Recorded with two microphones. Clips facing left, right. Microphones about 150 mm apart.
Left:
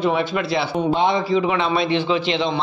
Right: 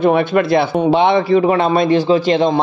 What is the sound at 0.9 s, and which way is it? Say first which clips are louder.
Speech: right 6 dB; 70° right (ahead or behind).